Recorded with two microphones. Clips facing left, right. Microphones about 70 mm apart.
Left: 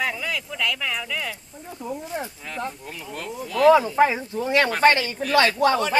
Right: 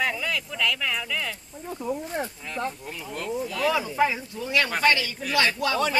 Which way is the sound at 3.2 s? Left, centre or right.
Centre.